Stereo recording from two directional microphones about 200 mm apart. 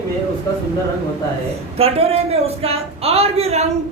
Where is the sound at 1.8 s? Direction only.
30° right (ahead or behind).